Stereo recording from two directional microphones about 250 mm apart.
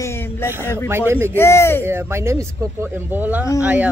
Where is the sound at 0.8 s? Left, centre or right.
Centre.